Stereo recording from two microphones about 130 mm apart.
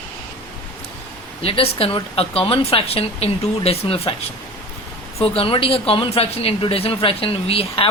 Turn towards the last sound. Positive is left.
turn(degrees=45)  # may be behind; listen again after turning